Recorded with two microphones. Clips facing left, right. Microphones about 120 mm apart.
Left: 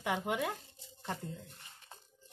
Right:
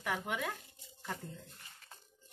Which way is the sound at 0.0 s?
15° left (ahead or behind).